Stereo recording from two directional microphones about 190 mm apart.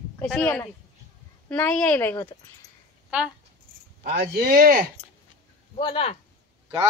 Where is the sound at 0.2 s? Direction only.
5° left (ahead or behind).